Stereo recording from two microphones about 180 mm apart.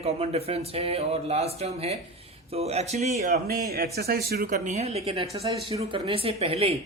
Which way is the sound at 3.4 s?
55° right (ahead or behind).